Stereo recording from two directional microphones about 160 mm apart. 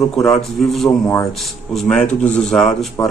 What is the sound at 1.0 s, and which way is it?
Speech, 20° left (ahead or behind).